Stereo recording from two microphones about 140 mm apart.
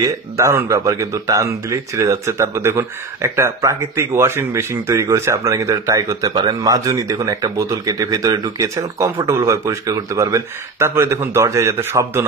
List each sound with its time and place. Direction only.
0.0 s speech: 20° right (ahead or behind)